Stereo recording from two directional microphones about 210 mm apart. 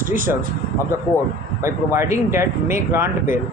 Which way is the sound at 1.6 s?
15° right (ahead or behind).